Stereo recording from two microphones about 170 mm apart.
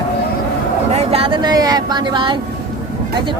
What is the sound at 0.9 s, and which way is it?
Speech, 35° right (ahead or behind).